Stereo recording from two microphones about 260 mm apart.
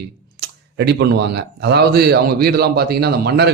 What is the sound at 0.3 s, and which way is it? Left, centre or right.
Speech, right.